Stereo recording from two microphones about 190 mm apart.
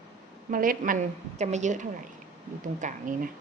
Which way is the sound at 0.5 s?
50° right (ahead or behind).